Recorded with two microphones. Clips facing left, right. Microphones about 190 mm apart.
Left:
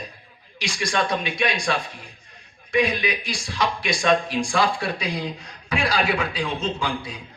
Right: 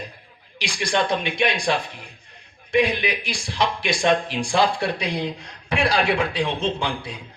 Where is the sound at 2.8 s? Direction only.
30° right (ahead or behind).